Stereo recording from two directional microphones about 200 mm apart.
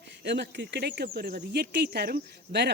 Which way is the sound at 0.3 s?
60° right (ahead or behind).